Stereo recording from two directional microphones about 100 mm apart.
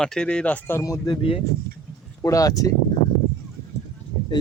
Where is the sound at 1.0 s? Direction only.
65° left (ahead or behind).